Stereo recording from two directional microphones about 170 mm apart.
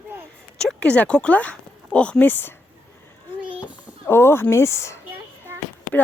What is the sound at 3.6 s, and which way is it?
Speech, 15° left (ahead or behind).